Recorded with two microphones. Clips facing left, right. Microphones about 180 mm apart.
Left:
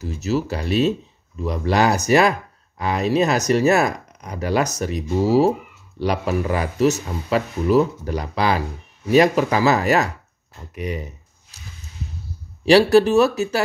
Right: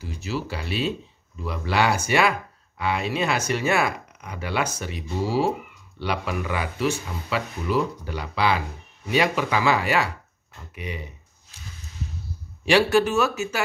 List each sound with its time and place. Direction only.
0.0 s speech: 40° left (ahead or behind)
12.6 s speech: 35° left (ahead or behind)